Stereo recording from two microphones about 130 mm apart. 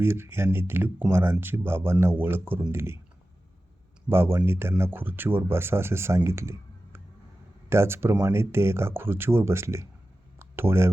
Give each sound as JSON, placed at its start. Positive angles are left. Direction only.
{"t": 0.0, "sound": "speech", "side_deg": -20}
{"t": 4.1, "sound": "speech", "side_deg": -15}
{"t": 10.3, "sound": "a sound", "side_deg": -15}